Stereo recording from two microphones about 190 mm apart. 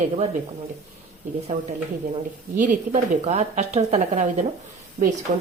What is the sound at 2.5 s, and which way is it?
A woman's voice, 40° right (ahead or behind).